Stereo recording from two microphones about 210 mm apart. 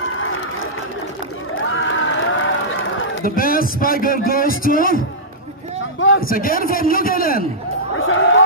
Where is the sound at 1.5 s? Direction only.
65° left (ahead or behind).